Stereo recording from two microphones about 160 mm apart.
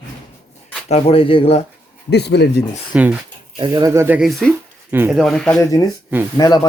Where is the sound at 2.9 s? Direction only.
5° right (ahead or behind).